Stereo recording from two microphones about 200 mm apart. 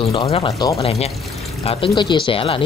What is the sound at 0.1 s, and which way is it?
Speech, 25° left (ahead or behind).